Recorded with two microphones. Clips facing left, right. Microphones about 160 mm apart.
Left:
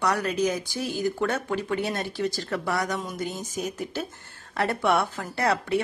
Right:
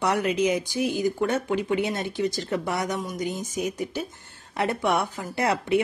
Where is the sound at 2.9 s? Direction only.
10° right (ahead or behind).